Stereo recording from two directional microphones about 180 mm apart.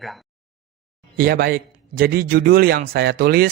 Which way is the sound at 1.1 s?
55° right (ahead or behind).